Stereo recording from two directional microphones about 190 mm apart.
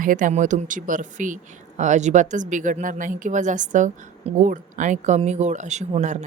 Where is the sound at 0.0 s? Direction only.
45° right (ahead or behind).